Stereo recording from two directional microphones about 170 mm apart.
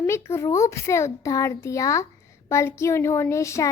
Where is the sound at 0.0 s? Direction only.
15° left (ahead or behind).